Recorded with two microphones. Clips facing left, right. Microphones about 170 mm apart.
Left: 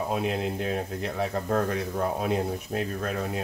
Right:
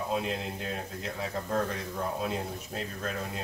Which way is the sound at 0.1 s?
60° left (ahead or behind).